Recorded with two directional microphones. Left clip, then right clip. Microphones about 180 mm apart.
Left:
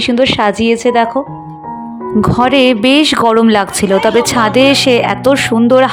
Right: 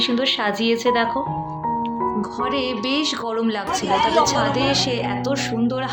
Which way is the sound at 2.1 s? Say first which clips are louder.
Left 13 dB; 70° left (ahead or behind).